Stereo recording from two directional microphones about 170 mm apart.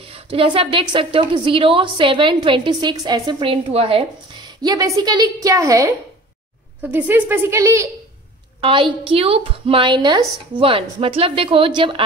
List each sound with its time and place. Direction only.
0.1 s a woman's voice: 30° right (ahead or behind)
4.6 s a woman's voice: 20° right (ahead or behind)
8.5 s a woman's voice: 30° right (ahead or behind)